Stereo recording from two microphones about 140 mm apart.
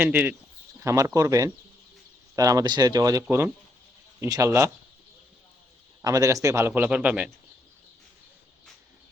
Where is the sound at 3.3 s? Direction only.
15° right (ahead or behind).